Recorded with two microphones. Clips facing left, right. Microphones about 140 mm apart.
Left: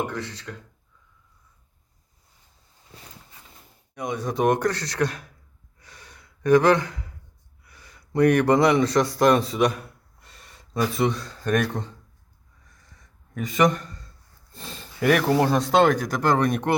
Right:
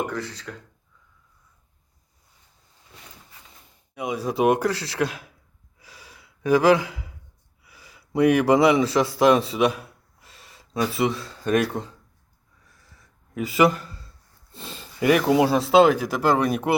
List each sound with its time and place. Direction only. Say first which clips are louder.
0.1 s speech: right 1 dB; centre (ahead or behind)
3.9 s speech: right 2 dB; 5° right (ahead or behind)
5.8 s gasp: right 1 dB; 5° right (ahead or behind)
7.6 s a man's voice: right 1 dB; 5° right (ahead or behind)
12.6 s a sound: even; 5° right (ahead or behind)
14.5 s speech: right 1 dB; centre (ahead or behind)